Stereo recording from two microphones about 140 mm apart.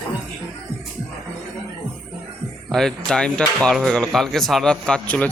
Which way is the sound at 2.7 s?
5° left (ahead or behind).